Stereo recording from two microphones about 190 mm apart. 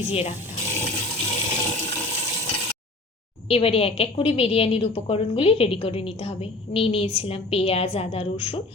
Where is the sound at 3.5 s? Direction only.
30° left (ahead or behind).